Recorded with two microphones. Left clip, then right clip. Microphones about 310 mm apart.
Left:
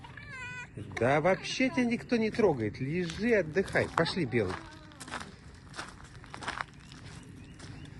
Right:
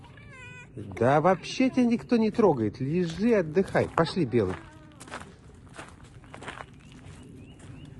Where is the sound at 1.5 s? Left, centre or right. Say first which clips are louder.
Right 4 dB; centre.